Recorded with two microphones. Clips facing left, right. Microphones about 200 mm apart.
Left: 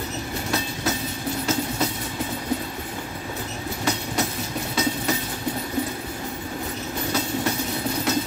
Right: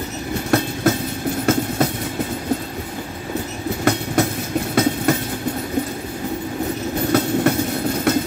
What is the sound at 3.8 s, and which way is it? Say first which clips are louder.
Train: right 7 dB; 55° right (ahead or behind).